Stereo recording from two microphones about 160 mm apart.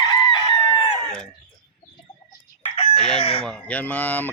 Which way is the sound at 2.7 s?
40° left (ahead or behind).